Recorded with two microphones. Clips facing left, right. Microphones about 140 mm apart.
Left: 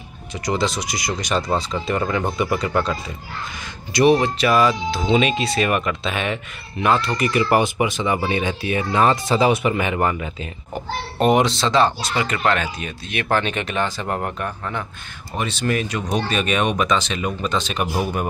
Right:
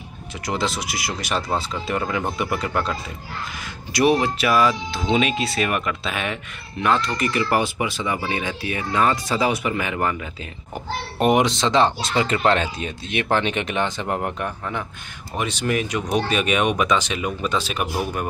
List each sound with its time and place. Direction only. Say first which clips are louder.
0.5 s speech: left 3 dB; 5° right (ahead or behind); by 10.3 s 25° left (ahead or behind)
11.1 s speech: left 1 dB; 15° right (ahead or behind)
17.9 s speech: left 3 dB; 10° left (ahead or behind)